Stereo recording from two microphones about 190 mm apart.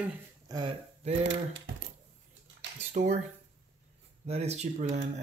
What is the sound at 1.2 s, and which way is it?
Speech, 75° right (ahead or behind).